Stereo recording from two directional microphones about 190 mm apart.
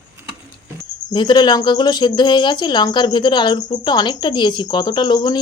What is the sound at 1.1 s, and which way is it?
Speech, 25° left (ahead or behind).